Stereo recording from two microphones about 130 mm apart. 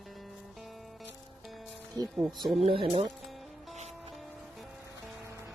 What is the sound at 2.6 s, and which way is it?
Speech, 45° right (ahead or behind).